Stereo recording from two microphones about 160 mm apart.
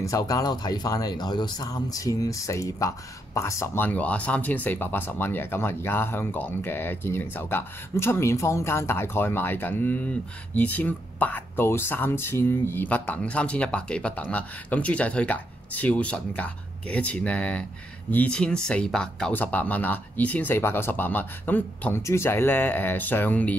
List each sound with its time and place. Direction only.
0.0 s speech: 20° left (ahead or behind)